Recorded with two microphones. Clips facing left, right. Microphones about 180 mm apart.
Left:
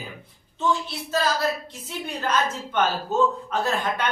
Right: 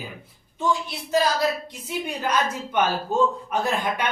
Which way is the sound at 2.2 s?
10° right (ahead or behind).